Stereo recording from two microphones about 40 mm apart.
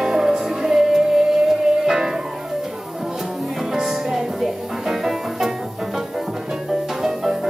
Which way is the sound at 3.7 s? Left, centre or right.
Centre.